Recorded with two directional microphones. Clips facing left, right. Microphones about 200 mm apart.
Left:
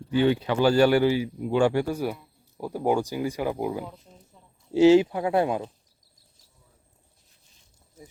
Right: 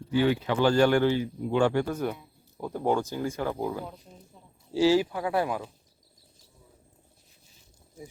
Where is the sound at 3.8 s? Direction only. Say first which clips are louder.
Even; centre (ahead or behind).